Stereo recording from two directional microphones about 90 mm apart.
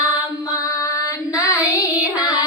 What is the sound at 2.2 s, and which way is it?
Music, 45° left (ahead or behind).